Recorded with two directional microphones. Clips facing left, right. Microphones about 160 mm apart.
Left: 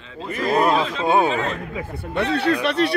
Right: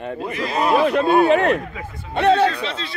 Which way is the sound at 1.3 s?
65° right (ahead or behind).